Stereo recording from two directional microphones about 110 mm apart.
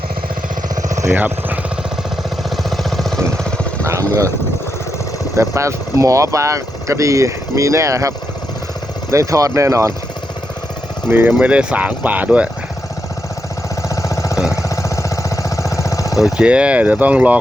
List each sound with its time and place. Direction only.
1.0 s speech: 15° right (ahead or behind)
2.6 s vehicle: centre (ahead or behind)
5.4 s speech: 25° right (ahead or behind)
11.1 s speech: 20° right (ahead or behind)
13.8 s a sound: 30° left (ahead or behind)
16.1 s speech: 5° right (ahead or behind)